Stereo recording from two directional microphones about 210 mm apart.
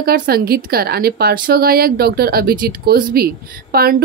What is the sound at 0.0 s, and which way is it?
A woman's voice, 45° right (ahead or behind).